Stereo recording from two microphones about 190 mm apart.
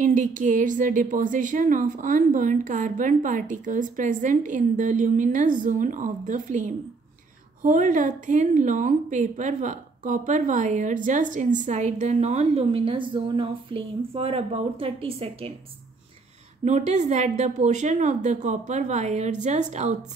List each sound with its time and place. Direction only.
0.0 s a woman's voice: 40° right (ahead or behind)
16.6 s a woman's voice: 35° right (ahead or behind)